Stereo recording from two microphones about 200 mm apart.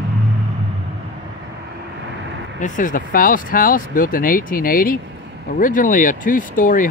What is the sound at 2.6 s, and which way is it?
Speech, 40° left (ahead or behind).